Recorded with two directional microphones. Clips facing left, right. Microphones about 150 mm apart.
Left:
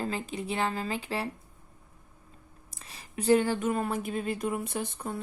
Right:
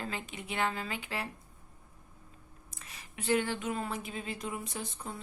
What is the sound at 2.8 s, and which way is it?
Speech, 35° left (ahead or behind).